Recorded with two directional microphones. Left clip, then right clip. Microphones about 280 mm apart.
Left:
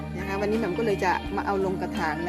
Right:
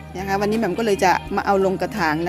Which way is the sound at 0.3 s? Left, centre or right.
Right.